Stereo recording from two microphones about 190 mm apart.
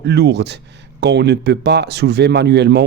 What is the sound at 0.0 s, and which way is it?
Speech, 65° right (ahead or behind).